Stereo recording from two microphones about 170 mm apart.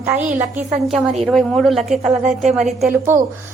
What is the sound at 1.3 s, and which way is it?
Speech, centre (ahead or behind).